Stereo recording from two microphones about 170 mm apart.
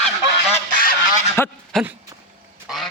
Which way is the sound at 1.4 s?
15° left (ahead or behind).